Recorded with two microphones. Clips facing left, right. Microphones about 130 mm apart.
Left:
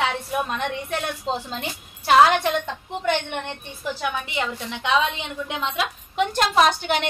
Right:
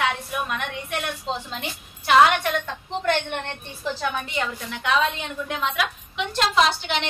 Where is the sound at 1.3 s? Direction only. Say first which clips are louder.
Left 2 dB; 40° left (ahead or behind).